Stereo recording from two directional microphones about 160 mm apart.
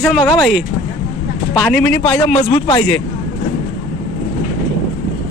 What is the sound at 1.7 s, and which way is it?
Speech, 10° left (ahead or behind).